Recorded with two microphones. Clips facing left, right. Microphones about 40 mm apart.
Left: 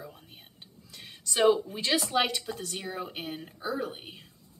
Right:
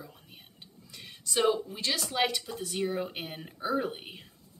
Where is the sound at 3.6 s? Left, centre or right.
Right.